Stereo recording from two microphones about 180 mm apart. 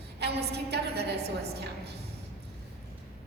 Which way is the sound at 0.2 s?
65° right (ahead or behind).